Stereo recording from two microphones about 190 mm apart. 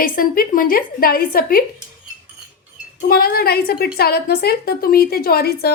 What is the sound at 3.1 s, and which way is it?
A woman's voice, 50° left (ahead or behind).